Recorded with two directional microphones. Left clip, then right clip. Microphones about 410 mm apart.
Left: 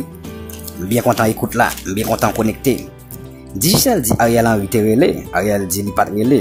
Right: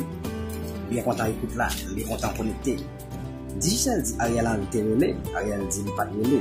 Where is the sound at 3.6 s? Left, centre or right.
Centre.